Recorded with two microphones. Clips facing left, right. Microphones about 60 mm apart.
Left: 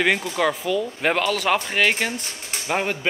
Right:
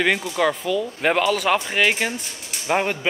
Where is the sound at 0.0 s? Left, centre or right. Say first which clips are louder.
Right 1 dB; centre.